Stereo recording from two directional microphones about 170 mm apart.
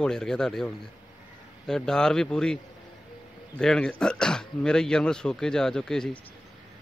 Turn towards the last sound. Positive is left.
turn(degrees=5)  # may be behind; listen again after turning